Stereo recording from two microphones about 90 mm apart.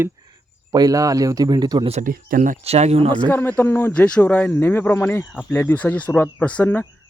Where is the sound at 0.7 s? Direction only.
45° right (ahead or behind).